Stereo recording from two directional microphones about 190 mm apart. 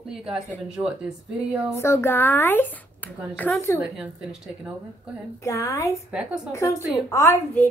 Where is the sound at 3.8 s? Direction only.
5° right (ahead or behind).